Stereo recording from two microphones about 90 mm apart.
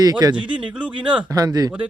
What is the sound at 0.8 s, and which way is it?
Speech, 15° right (ahead or behind).